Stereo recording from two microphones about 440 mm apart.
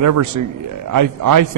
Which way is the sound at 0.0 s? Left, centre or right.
Right.